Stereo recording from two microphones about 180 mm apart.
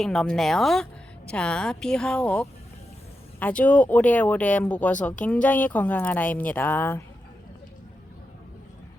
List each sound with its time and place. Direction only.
0.0 s a woman's voice: 5° left (ahead or behind)